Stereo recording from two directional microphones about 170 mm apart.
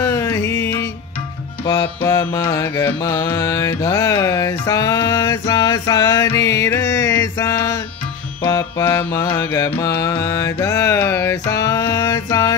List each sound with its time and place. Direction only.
0.0 s music: 15° left (ahead or behind)
0.5 s music: 90° left
2.0 s carnatic music: 20° left (ahead or behind)
3.1 s music: 15° left (ahead or behind)
6.9 s mantra: 20° left (ahead or behind)
8.4 s music: 20° left (ahead or behind)